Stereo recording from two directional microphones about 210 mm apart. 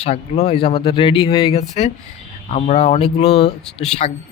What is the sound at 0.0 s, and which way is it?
A man's voice, 30° left (ahead or behind).